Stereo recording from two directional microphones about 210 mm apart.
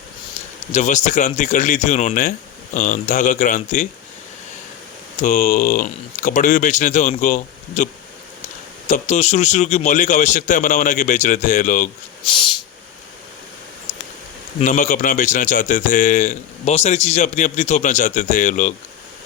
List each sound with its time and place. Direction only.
0.7 s a man's voice: 35° left (ahead or behind)
5.2 s a man's voice: 35° left (ahead or behind)
8.9 s a man's voice: 35° left (ahead or behind)
12.2 s a sound: 25° left (ahead or behind)
14.6 s a man's voice: 35° left (ahead or behind)